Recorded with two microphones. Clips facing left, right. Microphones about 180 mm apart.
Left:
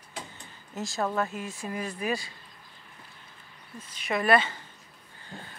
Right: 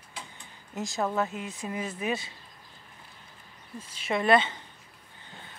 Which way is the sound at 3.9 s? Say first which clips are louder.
Right 1 dB; 25° right (ahead or behind).